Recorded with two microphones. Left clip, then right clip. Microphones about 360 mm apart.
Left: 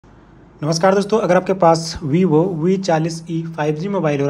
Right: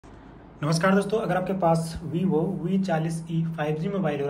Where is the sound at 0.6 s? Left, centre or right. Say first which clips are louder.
Left 8 dB; centre.